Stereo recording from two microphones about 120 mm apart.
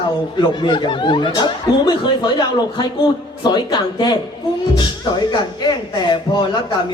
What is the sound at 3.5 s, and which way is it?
Speech, 35° left (ahead or behind).